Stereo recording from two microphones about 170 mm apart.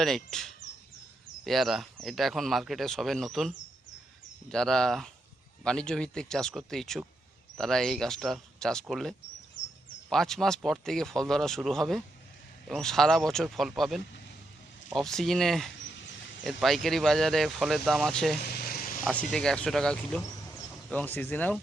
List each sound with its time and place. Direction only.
0.0 s speech: centre (ahead or behind)
18.6 s vehicle: 60° left (ahead or behind)
19.3 s speech: 5° left (ahead or behind)